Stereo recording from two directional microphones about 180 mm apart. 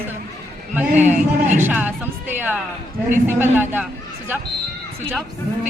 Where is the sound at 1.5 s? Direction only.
10° right (ahead or behind).